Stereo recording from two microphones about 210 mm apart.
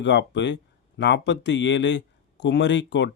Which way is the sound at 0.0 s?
55° left (ahead or behind).